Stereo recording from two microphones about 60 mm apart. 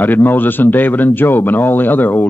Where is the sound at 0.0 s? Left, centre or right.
Left.